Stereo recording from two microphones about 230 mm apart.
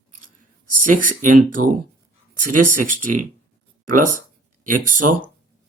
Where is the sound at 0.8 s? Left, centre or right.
Right.